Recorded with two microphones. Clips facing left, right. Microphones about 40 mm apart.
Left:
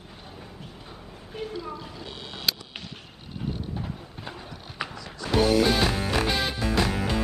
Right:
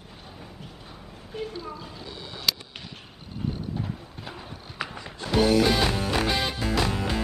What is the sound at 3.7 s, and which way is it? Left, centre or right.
Clip-clop, centre.